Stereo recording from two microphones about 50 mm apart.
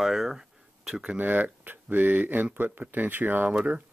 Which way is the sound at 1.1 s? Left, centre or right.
Right.